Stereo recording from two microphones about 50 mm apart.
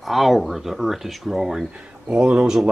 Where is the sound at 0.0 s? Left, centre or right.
Centre.